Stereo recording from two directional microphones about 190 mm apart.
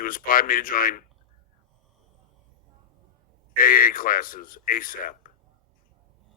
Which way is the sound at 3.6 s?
50° left (ahead or behind).